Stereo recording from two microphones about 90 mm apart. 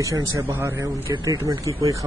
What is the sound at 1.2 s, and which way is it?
Speech, 45° right (ahead or behind).